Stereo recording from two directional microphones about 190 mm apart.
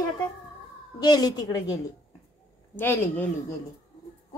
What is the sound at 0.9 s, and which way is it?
A woman's voice, 20° left (ahead or behind).